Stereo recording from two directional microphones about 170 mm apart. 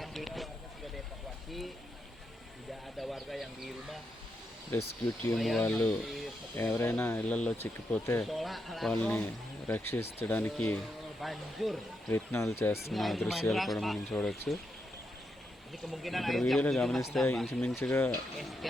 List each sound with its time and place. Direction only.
0.0 s a sound: centre (ahead or behind)
1.5 s speech: centre (ahead or behind)
3.0 s speech: centre (ahead or behind)
4.7 s speech: 10° left (ahead or behind)
5.3 s speech: centre (ahead or behind)
6.6 s speech: 15° left (ahead or behind)
8.2 s speech: centre (ahead or behind)
12.1 s speech: 15° left (ahead or behind)
12.9 s speech: centre (ahead or behind)
15.9 s speech: centre (ahead or behind)